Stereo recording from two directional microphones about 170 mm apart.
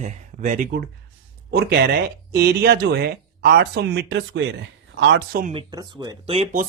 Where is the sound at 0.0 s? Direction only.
45° right (ahead or behind).